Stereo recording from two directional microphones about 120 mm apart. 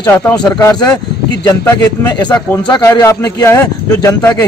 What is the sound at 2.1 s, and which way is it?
A man's voice, 35° left (ahead or behind).